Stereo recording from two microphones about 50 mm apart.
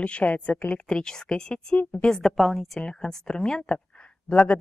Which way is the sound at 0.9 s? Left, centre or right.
Centre.